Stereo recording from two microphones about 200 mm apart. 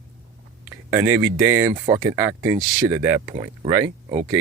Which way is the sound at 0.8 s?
10° right (ahead or behind).